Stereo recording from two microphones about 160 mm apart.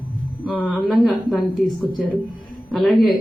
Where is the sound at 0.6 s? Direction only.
10° left (ahead or behind).